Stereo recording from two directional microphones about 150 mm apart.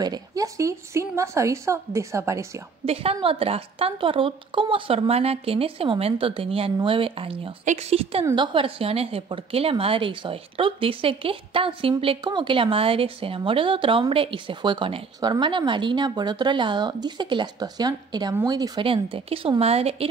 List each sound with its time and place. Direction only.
0.0 s a woman's voice: 25° right (ahead or behind)
2.8 s a woman's voice: 40° right (ahead or behind)
7.6 s a woman's voice: 50° right (ahead or behind)
15.1 s a woman's voice: 25° right (ahead or behind); by 20.1 s 40° right (ahead or behind)